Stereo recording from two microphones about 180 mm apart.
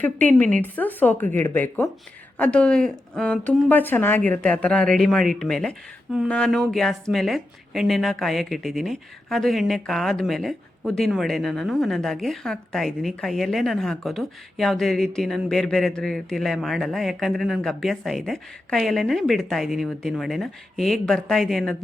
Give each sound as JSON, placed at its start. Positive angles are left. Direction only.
{"t": 0.0, "sound": "speech", "side_deg": 10}